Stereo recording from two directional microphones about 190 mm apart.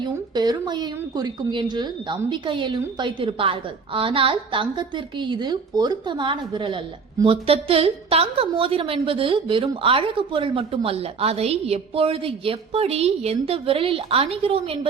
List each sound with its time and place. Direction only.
0.0 s a woman's voice: 20° right (ahead or behind)